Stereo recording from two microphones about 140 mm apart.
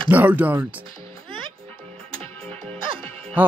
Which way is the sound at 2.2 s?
45° right (ahead or behind).